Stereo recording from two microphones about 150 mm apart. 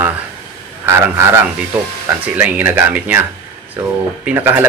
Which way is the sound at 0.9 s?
15° right (ahead or behind).